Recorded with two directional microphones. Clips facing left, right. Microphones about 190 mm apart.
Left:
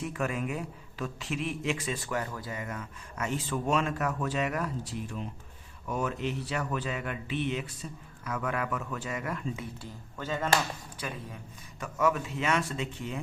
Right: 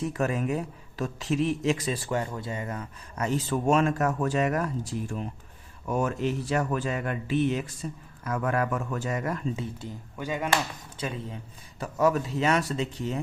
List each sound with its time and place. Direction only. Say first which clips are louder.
0.0 s a man's voice: right 5 dB; 40° right (ahead or behind)
10.2 s speech: right 2 dB; 15° right (ahead or behind)
10.5 s speech: right 1 dB; 25° right (ahead or behind)
11.8 s a man's voice: right 4 dB; 35° right (ahead or behind)